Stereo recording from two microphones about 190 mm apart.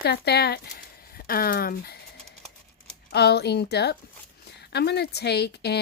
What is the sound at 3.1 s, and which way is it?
Speech, 60° left (ahead or behind).